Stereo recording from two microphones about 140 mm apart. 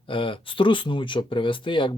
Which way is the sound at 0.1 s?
40° left (ahead or behind).